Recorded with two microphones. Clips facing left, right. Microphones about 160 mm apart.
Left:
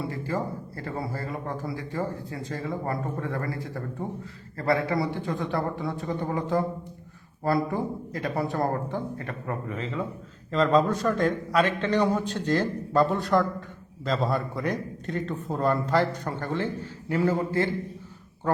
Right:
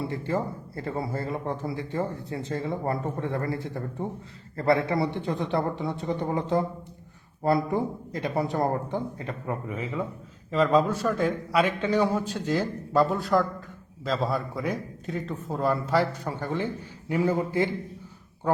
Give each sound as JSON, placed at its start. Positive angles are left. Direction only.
{"t": 0.0, "sound": "a man's voice", "side_deg": -25}